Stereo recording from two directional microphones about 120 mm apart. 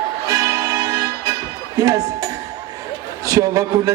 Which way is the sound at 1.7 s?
30° right (ahead or behind).